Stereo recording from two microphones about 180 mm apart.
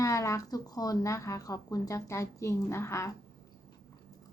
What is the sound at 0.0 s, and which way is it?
A woman's voice, 15° left (ahead or behind).